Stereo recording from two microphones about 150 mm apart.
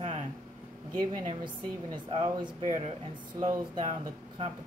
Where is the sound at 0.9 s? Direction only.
30° right (ahead or behind).